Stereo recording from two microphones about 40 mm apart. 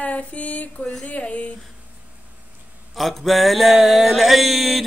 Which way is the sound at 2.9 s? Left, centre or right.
Centre.